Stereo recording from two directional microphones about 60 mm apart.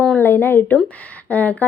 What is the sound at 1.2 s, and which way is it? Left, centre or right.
Speech, left.